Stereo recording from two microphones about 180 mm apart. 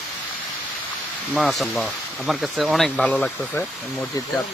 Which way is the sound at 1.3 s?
Centre (ahead or behind).